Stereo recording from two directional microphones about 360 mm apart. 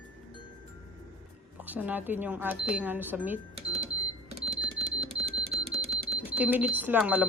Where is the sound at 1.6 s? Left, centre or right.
Centre.